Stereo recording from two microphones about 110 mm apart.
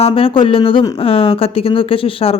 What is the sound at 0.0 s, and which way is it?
Speech, 55° left (ahead or behind).